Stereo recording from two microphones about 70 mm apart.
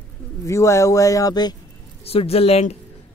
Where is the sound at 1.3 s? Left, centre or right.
Left.